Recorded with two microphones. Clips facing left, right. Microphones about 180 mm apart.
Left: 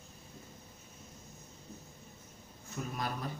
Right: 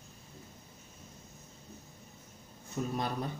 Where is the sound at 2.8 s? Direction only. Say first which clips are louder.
Right 5 dB; 35° right (ahead or behind).